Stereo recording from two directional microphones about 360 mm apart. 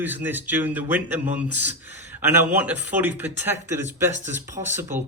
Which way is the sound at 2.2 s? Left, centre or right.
Centre.